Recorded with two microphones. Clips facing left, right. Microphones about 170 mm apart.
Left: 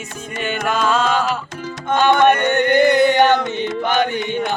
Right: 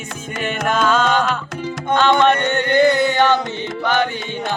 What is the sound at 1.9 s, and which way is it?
Music, 15° left (ahead or behind).